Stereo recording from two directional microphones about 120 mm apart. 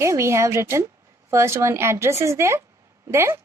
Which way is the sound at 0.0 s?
25° right (ahead or behind).